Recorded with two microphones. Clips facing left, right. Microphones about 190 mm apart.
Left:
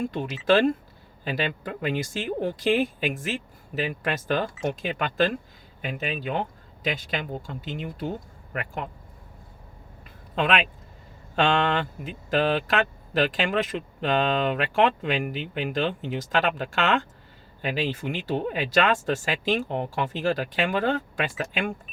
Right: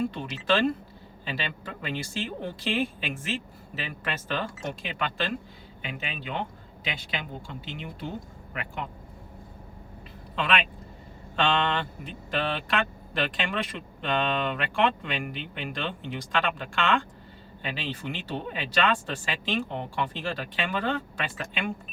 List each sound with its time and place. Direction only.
0.0 s speech: 45° left (ahead or behind)
10.3 s speech: 45° left (ahead or behind)